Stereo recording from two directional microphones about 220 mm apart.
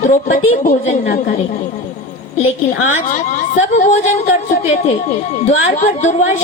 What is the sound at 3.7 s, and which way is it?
Speech, 30° left (ahead or behind).